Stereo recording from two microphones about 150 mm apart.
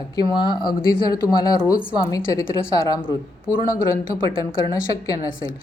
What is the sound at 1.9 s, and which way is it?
A woman's voice, 20° left (ahead or behind).